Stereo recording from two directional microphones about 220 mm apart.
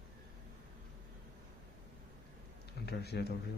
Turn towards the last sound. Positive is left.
turn(degrees=45)  # may be behind; listen again after turning